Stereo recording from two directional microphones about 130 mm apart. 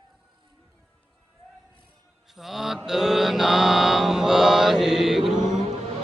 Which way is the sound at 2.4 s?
Centre (ahead or behind).